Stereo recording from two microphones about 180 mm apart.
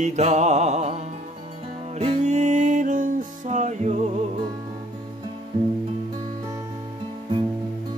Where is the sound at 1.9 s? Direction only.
35° right (ahead or behind).